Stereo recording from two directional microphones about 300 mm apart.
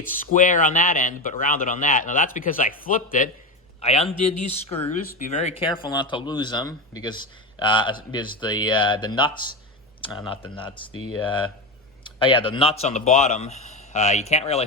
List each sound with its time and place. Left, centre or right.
0.3 s a man's voice: left
4.1 s speech: left
4.7 s speech: centre
10.5 s speech: centre
10.9 s speech: left
12.2 s speech: centre